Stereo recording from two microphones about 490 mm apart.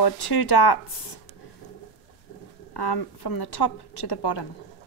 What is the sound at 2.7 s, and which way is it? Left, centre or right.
A woman's voice, left.